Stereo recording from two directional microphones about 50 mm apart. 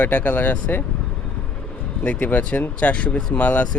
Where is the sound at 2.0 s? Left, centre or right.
Left.